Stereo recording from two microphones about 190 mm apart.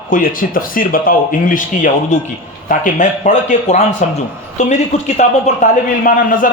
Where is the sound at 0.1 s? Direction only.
45° left (ahead or behind).